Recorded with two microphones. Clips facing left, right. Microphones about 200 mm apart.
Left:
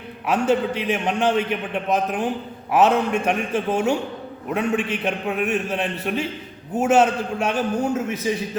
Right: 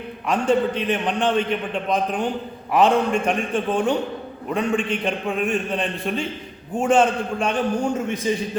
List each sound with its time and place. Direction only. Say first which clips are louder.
0.3 s a man's voice: even; 5° left (ahead or behind)